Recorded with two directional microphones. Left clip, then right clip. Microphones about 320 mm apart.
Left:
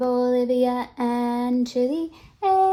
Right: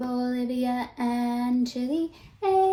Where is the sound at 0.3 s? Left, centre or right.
Left.